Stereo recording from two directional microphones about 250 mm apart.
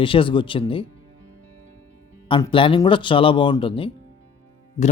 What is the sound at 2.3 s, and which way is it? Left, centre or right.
A man's voice, centre.